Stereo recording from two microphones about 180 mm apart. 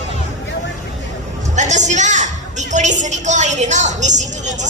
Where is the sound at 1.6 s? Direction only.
40° right (ahead or behind).